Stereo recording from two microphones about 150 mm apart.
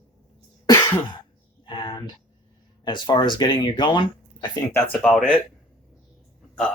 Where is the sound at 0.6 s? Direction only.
20° left (ahead or behind).